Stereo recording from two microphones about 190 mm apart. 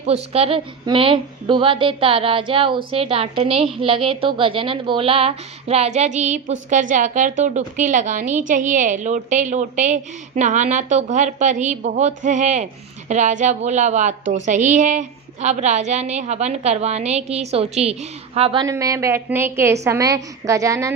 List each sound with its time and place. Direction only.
0.0 s a woman's voice: 30° right (ahead or behind)
18.6 s a woman's voice: 15° right (ahead or behind)